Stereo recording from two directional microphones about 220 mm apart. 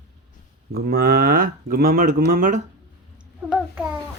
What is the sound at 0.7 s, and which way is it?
Speech, 45° right (ahead or behind).